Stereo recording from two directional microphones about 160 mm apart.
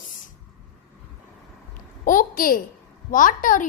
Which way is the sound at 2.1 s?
60° left (ahead or behind).